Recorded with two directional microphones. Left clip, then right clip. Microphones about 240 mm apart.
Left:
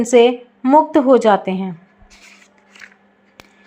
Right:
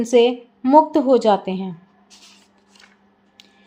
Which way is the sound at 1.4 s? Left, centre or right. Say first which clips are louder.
Left 4 dB; centre.